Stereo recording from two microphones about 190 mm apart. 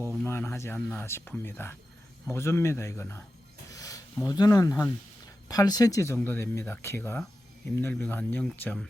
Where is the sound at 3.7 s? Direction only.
15° left (ahead or behind).